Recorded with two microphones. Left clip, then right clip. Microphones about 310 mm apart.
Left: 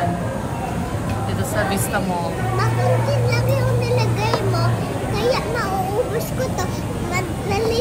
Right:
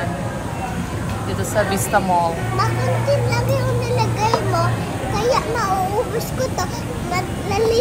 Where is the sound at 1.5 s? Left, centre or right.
Centre.